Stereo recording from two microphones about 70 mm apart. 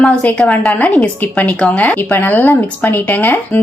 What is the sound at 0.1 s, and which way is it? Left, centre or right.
A woman's voice, centre.